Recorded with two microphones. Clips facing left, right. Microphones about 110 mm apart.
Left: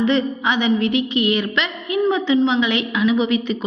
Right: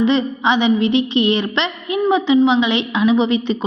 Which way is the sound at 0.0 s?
20° right (ahead or behind).